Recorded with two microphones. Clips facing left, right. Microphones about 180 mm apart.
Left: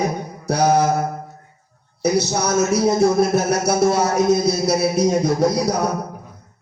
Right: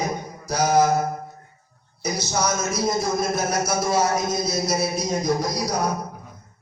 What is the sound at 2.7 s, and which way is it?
A man's voice, 65° left (ahead or behind).